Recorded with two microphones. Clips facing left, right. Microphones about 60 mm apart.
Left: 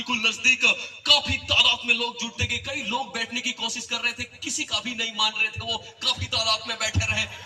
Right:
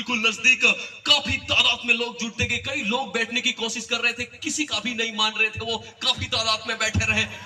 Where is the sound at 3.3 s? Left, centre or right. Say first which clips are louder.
Right 4 dB; right.